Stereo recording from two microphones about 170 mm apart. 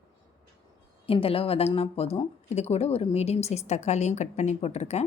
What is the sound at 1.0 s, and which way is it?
Speech, 35° left (ahead or behind).